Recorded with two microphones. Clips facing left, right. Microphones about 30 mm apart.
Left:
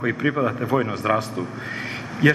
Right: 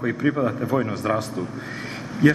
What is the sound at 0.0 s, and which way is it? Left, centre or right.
A man's voice, left.